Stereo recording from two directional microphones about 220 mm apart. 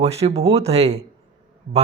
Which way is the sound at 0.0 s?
30° right (ahead or behind).